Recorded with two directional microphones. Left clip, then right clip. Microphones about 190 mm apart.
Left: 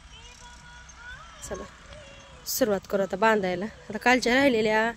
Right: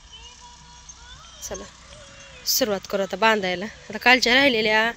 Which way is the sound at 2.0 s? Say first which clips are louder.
Right 4 dB; 60° right (ahead or behind).